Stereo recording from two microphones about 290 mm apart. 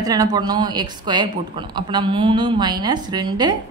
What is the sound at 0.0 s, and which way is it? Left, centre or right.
A woman's voice, centre.